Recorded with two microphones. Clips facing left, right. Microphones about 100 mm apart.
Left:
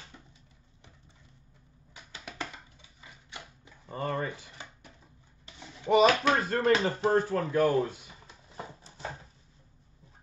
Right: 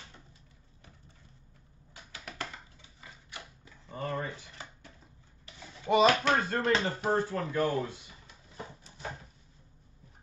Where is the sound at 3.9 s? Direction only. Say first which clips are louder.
Left 3 dB; 70° left (ahead or behind).